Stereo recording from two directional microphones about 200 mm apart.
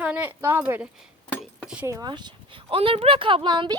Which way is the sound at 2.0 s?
20° right (ahead or behind).